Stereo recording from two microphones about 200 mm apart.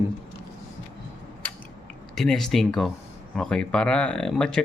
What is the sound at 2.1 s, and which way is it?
Speech, centre (ahead or behind).